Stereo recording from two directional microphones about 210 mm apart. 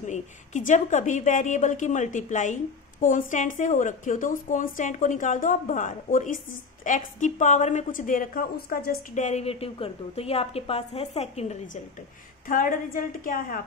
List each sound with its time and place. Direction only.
0.0 s a woman's voice: 35° left (ahead or behind)